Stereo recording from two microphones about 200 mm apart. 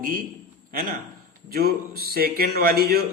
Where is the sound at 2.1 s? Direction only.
50° right (ahead or behind).